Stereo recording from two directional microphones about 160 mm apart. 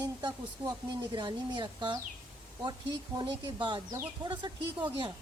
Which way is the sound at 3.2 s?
30° right (ahead or behind).